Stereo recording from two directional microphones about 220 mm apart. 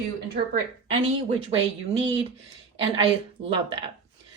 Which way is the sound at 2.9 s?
25° right (ahead or behind).